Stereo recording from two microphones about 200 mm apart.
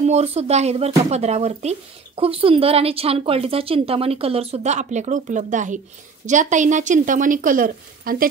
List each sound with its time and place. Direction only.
0.0 s a woman's voice: 35° right (ahead or behind)